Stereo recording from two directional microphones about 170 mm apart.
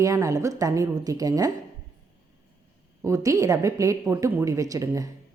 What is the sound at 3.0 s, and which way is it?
A woman's voice, 20° right (ahead or behind).